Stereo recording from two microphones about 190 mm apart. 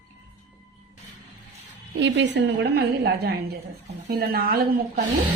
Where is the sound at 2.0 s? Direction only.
65° right (ahead or behind).